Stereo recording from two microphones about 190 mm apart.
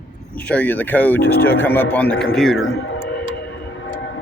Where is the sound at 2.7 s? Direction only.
75° left (ahead or behind).